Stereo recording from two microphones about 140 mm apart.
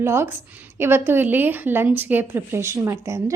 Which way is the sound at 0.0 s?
20° right (ahead or behind).